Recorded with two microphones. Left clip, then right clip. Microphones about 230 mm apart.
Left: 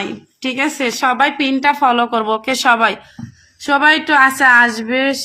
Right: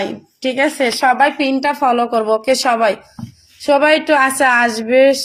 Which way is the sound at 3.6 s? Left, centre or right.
Centre.